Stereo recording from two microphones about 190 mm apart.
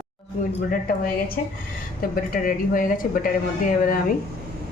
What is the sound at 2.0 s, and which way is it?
A woman's voice, 50° left (ahead or behind).